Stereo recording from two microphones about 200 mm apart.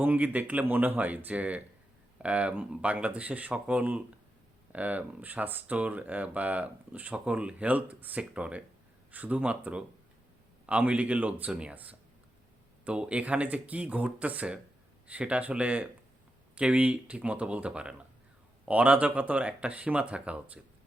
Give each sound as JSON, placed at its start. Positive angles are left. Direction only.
{"t": 0.0, "sound": "speech", "side_deg": -10}